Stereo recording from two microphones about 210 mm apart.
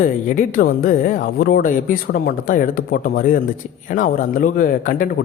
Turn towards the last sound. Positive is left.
turn(degrees=40)  # may be behind; listen again after turning